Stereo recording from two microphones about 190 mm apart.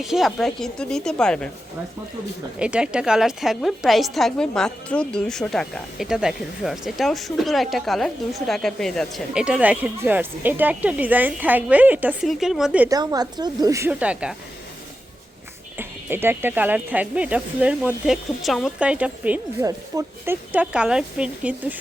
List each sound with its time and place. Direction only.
0.0 s a woman's voice: centre (ahead or behind)
2.6 s a woman's voice: 5° right (ahead or behind)
12.9 s speech: 20° right (ahead or behind)
15.8 s speech: 10° right (ahead or behind)